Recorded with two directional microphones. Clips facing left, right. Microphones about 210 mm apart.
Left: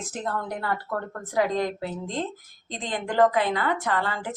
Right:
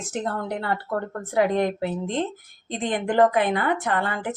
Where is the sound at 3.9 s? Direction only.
55° right (ahead or behind).